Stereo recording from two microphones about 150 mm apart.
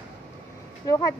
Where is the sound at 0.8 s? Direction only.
25° left (ahead or behind).